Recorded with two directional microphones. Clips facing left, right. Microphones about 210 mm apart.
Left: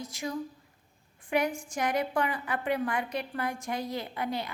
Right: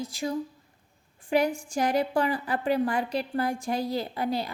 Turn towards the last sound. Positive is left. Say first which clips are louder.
# right 4 dB
turn(degrees=-35)  # may be behind; listen again after turning